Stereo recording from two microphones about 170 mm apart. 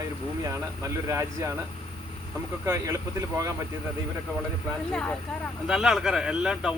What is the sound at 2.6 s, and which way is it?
Speech, 15° right (ahead or behind).